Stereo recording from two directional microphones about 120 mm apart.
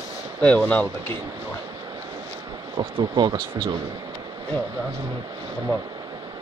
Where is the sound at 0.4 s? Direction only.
10° left (ahead or behind).